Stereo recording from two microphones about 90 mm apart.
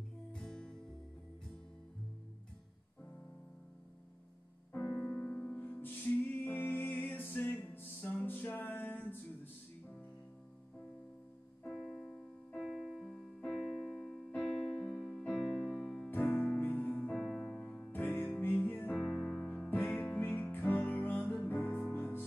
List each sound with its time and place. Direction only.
0.3 s music: 10° left (ahead or behind)
4.8 s music: 15° left (ahead or behind)
11.7 s music: centre (ahead or behind)
13.5 s keyboard: centre (ahead or behind)
15.3 s music: 5° right (ahead or behind)
16.1 s music: 20° left (ahead or behind)
17.1 s music: centre (ahead or behind)
17.9 s music: 20° left (ahead or behind)
18.9 s music: 5° left (ahead or behind)
20.2 s music: 20° left (ahead or behind)